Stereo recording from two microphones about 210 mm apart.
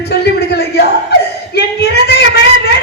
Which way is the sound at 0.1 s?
50° left (ahead or behind).